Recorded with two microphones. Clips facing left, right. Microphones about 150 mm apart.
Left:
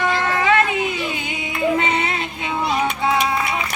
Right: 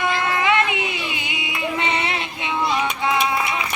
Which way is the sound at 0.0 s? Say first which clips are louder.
Left 1 dB; 40° left (ahead or behind).